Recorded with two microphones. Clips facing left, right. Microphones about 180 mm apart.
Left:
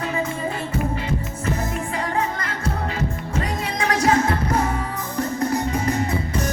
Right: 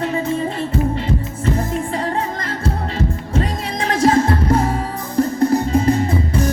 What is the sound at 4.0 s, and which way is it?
Music, 30° right (ahead or behind).